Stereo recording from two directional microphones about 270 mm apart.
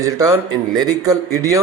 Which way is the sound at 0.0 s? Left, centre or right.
Centre.